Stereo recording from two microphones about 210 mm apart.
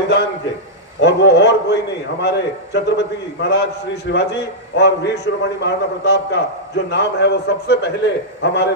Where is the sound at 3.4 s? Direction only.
55° left (ahead or behind).